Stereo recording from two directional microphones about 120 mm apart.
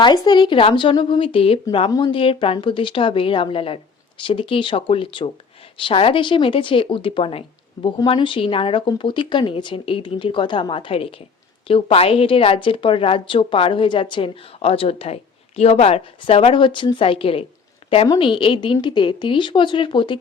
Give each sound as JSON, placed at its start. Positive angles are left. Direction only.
{"t": 0.0, "sound": "a woman's voice", "side_deg": 35}
{"t": 1.9, "sound": "a woman's voice", "side_deg": 40}